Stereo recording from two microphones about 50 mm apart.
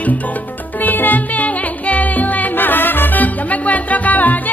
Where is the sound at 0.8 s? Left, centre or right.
Left.